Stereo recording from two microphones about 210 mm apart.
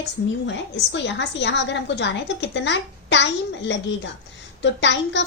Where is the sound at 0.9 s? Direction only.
55° left (ahead or behind).